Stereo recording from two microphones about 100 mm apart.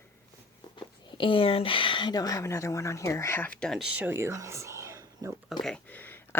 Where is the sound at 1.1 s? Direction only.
60° left (ahead or behind); by 3.4 s 30° left (ahead or behind).